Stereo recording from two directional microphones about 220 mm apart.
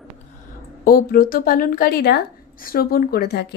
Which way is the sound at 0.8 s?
40° left (ahead or behind).